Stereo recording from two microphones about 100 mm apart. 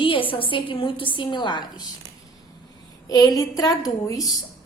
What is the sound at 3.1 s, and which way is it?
A child's voice, 40° left (ahead or behind).